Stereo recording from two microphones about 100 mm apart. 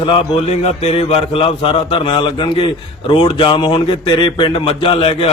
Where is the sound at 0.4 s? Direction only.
90° left.